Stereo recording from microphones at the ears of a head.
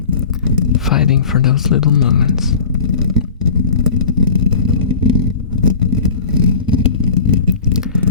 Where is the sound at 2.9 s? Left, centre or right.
Left.